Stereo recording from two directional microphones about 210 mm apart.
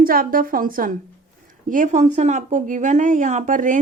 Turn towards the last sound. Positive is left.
turn(degrees=-40)  # may be behind; listen again after turning